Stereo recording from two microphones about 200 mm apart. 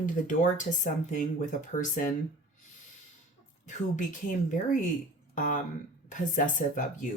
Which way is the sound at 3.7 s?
40° left (ahead or behind).